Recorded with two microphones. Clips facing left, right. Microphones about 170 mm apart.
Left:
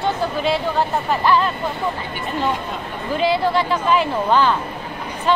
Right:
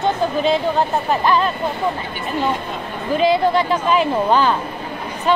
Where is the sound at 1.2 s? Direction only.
20° right (ahead or behind).